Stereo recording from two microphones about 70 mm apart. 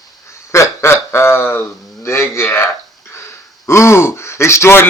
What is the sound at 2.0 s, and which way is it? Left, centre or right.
A man's voice, left.